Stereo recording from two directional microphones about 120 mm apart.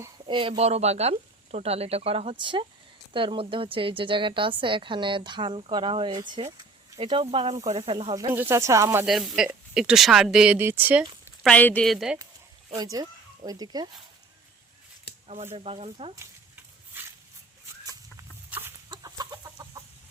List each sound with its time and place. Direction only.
0.3 s a woman's voice: 45° right (ahead or behind)
8.3 s speech: 20° right (ahead or behind)
9.0 s speech: 5° right (ahead or behind)
11.4 s a woman's voice: 10° left (ahead or behind)
11.9 s speech: 5° right (ahead or behind)
12.7 s speech: 35° right (ahead or behind)
15.5 s a woman's voice: 55° right (ahead or behind)
18.5 s chicken: 15° right (ahead or behind)
18.9 s chicken: 35° right (ahead or behind)